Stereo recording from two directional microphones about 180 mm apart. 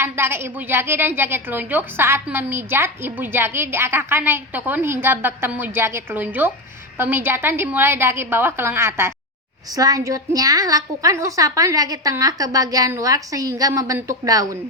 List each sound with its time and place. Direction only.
0.0 s a woman's voice: 15° right (ahead or behind)